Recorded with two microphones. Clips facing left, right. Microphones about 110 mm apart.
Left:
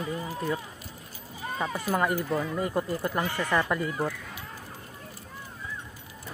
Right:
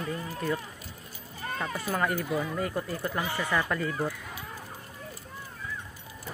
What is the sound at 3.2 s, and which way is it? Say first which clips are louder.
Speech: left 1 dB; 10° right (ahead or behind).